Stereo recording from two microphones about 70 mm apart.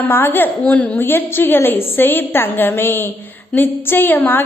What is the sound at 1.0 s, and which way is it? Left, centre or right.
A woman's voice, left.